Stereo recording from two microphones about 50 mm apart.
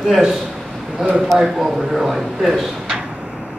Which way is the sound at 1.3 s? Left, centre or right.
Centre.